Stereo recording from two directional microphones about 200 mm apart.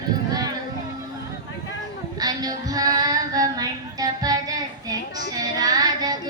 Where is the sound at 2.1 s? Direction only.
20° right (ahead or behind).